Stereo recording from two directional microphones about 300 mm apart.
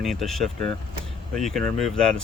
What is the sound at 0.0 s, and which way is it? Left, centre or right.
Speech, centre.